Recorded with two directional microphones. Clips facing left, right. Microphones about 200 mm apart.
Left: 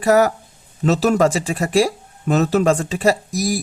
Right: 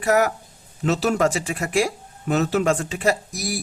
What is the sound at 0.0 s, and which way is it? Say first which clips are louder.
Speech: left 5 dB; 35° left (ahead or behind).